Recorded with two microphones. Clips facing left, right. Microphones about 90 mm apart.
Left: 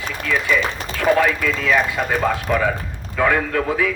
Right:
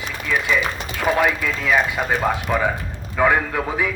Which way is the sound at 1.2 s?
15° right (ahead or behind).